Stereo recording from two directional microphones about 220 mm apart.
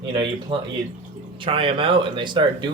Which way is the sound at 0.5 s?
20° right (ahead or behind).